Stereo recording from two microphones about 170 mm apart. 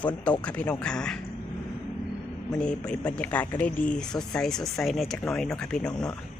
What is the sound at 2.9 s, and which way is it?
Speech, 5° left (ahead or behind).